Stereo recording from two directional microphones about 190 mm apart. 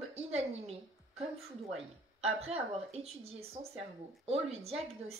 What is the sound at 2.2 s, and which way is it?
Speech, 30° right (ahead or behind).